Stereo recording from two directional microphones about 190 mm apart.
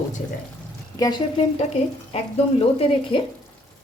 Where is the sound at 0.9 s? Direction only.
20° left (ahead or behind).